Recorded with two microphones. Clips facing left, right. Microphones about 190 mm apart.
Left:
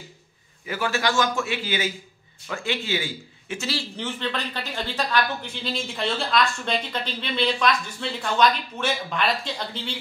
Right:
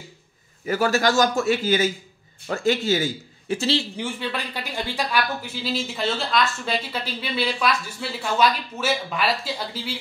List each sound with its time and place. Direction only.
0.7 s a man's voice: 40° right (ahead or behind)
3.9 s speech: 10° right (ahead or behind)